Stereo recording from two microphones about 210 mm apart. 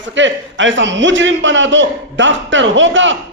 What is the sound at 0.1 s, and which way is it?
A man's voice, 60° right (ahead or behind).